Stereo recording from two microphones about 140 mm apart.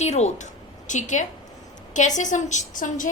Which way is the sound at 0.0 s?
55° left (ahead or behind).